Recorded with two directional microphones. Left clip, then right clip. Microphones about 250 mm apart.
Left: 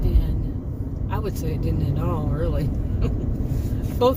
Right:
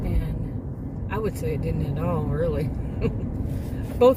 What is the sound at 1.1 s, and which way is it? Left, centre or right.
Speech, centre.